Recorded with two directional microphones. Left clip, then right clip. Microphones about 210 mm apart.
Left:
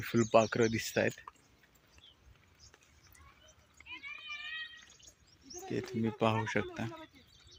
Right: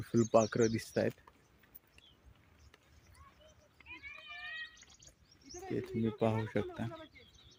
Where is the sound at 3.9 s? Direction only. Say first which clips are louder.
Left 4 dB; 55° right (ahead or behind).